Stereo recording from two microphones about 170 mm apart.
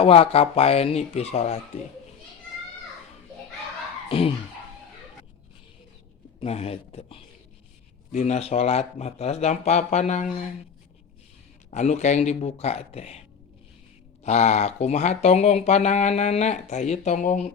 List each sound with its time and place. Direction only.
0.0 s speech: 35° left (ahead or behind)
4.1 s speech: 30° left (ahead or behind)
6.4 s speech: 35° left (ahead or behind)
11.7 s speech: 40° left (ahead or behind)
14.3 s speech: 40° left (ahead or behind)